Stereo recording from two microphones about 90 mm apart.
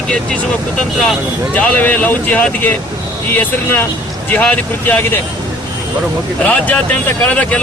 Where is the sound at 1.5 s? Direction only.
15° left (ahead or behind).